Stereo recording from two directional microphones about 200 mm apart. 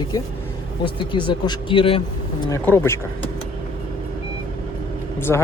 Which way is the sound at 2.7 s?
15° left (ahead or behind).